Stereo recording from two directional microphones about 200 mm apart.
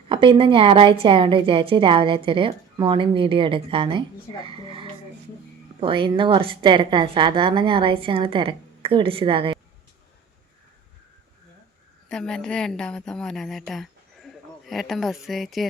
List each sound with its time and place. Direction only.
0.1 s a woman's voice: 25° right (ahead or behind)
12.0 s a woman's voice: 5° left (ahead or behind)